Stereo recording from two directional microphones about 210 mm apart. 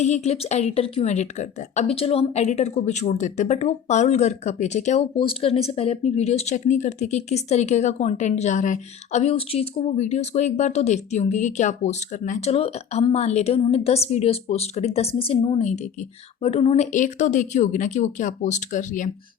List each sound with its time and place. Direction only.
0.0 s a woman's voice: 30° left (ahead or behind)